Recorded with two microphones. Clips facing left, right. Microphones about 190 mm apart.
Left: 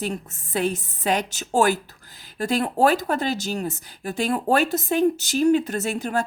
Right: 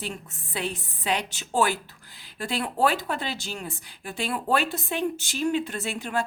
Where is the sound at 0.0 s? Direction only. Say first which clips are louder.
Left 7 dB; 45° left (ahead or behind).